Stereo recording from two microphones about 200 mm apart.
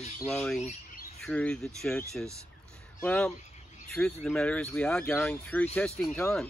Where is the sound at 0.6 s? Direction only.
35° left (ahead or behind).